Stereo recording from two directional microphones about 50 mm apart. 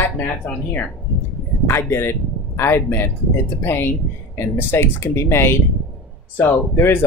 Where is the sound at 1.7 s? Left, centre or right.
Left.